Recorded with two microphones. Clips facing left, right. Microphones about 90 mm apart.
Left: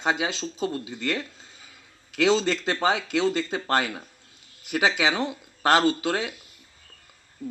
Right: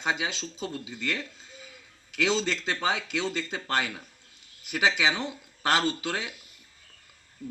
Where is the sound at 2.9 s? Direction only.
20° left (ahead or behind).